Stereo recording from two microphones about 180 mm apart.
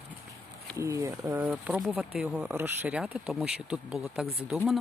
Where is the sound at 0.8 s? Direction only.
15° right (ahead or behind).